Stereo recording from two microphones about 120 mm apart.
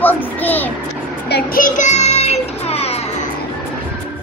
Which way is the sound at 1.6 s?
90° left.